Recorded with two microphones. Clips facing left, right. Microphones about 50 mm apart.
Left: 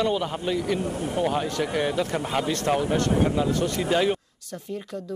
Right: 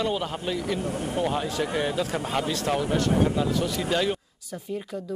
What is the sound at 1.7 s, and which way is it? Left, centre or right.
A man's voice, centre.